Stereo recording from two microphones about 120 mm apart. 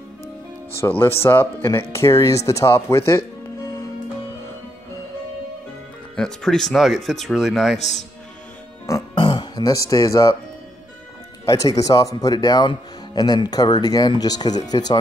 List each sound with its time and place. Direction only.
0.7 s speech: 20° left (ahead or behind)
6.1 s speech: 5° left (ahead or behind)
8.9 s speech: 30° left (ahead or behind)
9.2 s speech: 40° left (ahead or behind)
11.4 s speech: 30° left (ahead or behind)